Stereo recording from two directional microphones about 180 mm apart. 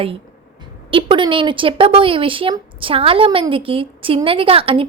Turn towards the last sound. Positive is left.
turn(degrees=-30)  # may be behind; listen again after turning